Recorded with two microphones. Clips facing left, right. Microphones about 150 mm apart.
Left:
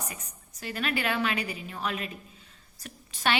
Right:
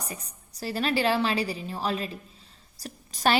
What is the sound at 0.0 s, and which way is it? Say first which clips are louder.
A woman's voice: right 2 dB; 35° right (ahead or behind).